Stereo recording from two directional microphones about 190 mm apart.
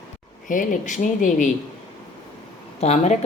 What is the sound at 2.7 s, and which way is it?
Speech, 35° left (ahead or behind).